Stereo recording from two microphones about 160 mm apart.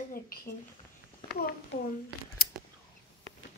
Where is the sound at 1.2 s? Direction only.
75° left (ahead or behind).